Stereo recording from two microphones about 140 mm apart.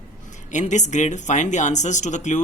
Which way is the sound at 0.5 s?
55° left (ahead or behind).